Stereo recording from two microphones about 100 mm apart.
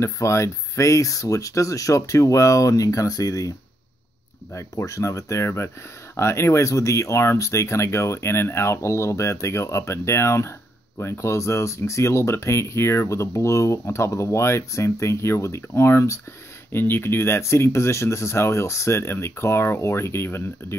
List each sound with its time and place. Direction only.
0.0 s speech: 30° left (ahead or behind)
4.6 s speech: 30° left (ahead or behind)